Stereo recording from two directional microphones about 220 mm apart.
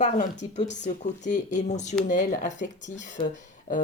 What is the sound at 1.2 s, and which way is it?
A woman's voice, 35° left (ahead or behind).